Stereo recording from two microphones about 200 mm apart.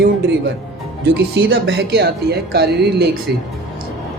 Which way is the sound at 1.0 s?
55° right (ahead or behind).